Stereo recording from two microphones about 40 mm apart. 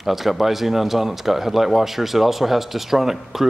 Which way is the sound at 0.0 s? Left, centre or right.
Centre.